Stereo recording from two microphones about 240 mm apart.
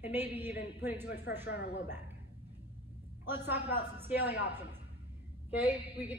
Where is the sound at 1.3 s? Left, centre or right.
Left.